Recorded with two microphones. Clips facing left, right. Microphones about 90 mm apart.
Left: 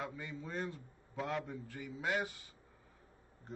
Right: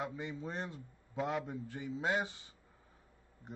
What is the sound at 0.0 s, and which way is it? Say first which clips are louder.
A man's voice: right 3 dB; 20° right (ahead or behind).